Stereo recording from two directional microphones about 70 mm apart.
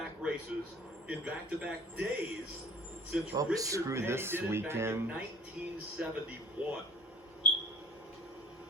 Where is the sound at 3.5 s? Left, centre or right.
Right.